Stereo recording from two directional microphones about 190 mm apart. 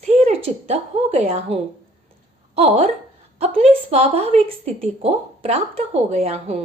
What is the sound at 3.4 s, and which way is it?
A woman's voice, 30° right (ahead or behind).